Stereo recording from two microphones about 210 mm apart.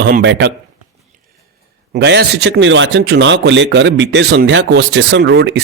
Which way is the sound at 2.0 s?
50° right (ahead or behind).